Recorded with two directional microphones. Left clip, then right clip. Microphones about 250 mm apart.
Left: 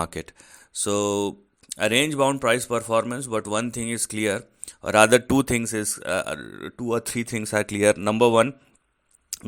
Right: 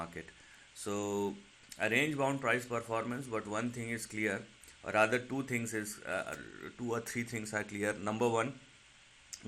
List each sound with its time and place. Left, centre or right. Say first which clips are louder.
0.0 s a man's voice: left 14 dB; left